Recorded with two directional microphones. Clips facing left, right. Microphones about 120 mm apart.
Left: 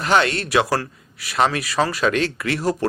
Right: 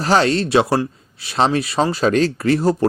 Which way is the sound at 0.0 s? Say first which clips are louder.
Right 3 dB; 35° right (ahead or behind).